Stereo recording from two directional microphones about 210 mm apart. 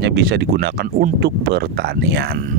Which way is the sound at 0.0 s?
50° right (ahead or behind).